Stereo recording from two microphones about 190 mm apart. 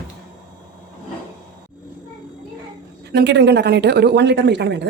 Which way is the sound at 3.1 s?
65° right (ahead or behind).